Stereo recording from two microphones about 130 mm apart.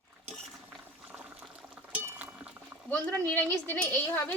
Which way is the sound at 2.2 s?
10° right (ahead or behind).